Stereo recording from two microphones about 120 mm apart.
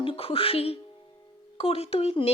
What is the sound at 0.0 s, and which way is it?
Speech, 50° left (ahead or behind).